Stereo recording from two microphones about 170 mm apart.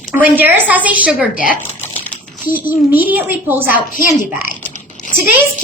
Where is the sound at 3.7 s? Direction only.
55° left (ahead or behind).